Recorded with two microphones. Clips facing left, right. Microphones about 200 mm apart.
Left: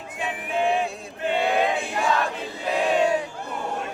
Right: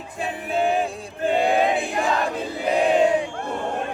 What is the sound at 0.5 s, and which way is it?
Music, 40° right (ahead or behind).